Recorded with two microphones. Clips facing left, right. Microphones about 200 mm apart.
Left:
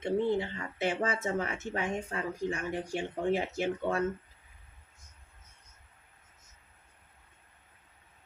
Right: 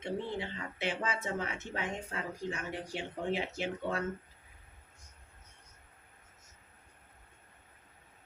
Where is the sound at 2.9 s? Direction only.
50° left (ahead or behind).